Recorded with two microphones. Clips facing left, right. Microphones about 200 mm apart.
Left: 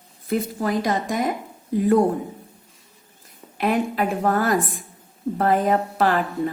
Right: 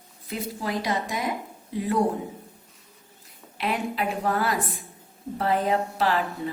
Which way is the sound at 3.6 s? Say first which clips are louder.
Left 6 dB; 50° left (ahead or behind).